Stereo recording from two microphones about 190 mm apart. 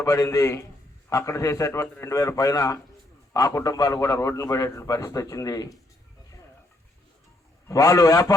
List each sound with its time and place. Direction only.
0.0 s a man's voice: 15° left (ahead or behind)
7.7 s a man's voice: 20° left (ahead or behind)